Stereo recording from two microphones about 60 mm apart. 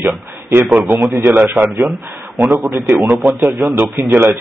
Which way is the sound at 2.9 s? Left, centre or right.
Right.